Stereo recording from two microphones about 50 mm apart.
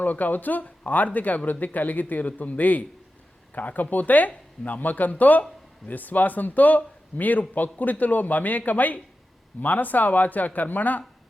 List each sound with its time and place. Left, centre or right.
0.0 s a man's voice: left